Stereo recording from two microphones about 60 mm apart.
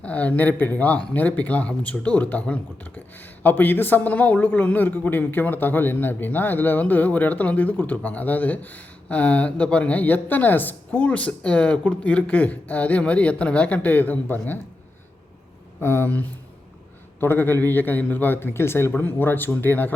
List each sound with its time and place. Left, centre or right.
0.0 s speech: left
15.8 s speech: left
17.2 s a man's voice: left